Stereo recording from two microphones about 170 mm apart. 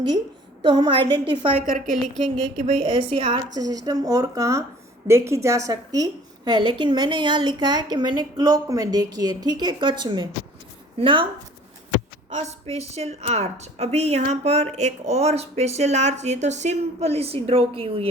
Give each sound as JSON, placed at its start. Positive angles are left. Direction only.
{"t": 0.6, "sound": "a woman's voice", "side_deg": -25}
{"t": 2.3, "sound": "a woman's voice", "side_deg": -45}
{"t": 2.8, "sound": "a woman's voice", "side_deg": -30}
{"t": 12.3, "sound": "a woman's voice", "side_deg": -40}